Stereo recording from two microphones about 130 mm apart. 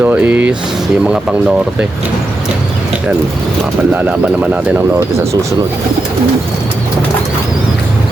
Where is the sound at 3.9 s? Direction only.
10° right (ahead or behind).